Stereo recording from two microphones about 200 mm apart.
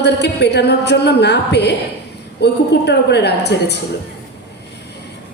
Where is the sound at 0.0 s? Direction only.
55° left (ahead or behind).